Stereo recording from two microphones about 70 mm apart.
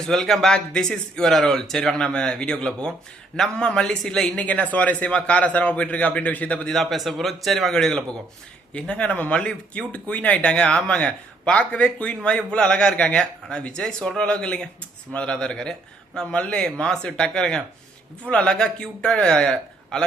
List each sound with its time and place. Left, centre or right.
0.0 s a man's voice: centre; by 6.7 s left
6.7 s a man's voice: centre